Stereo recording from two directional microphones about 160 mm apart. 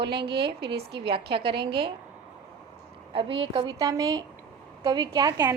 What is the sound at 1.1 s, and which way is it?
Speech, 35° right (ahead or behind).